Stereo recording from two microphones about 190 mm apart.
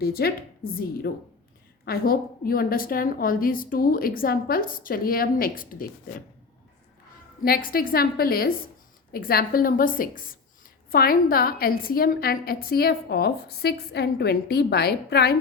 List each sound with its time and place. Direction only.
0.0 s a woman's voice: 55° left (ahead or behind)
7.4 s a woman's voice: 50° left (ahead or behind)